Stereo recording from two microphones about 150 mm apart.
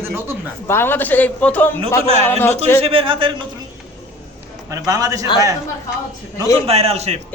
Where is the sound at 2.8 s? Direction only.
35° right (ahead or behind).